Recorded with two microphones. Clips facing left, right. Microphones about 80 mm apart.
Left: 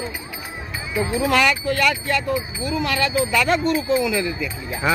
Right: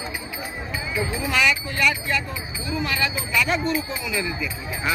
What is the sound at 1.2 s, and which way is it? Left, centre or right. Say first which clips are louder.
Speech: left 4 dB; left.